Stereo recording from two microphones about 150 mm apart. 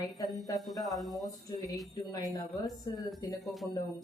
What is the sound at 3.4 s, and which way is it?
Speech, centre (ahead or behind).